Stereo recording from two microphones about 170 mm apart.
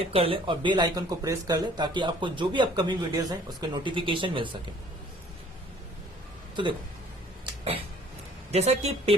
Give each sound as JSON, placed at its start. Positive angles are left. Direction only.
{"t": 0.0, "sound": "speech", "side_deg": -35}
{"t": 8.5, "sound": "a woman's voice", "side_deg": -40}